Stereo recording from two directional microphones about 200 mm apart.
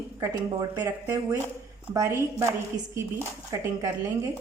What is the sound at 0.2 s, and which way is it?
Speech, 15° right (ahead or behind).